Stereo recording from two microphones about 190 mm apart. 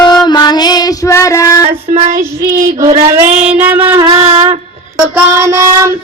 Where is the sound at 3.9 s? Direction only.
25° right (ahead or behind).